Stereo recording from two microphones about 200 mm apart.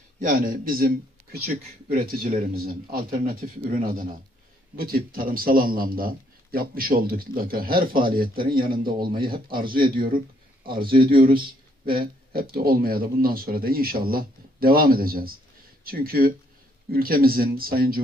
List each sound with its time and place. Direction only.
0.2 s speech: 45° right (ahead or behind)